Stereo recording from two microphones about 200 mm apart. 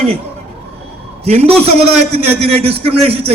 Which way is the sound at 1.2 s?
30° right (ahead or behind).